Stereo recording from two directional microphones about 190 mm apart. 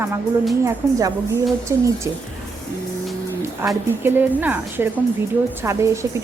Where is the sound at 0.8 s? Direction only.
10° right (ahead or behind).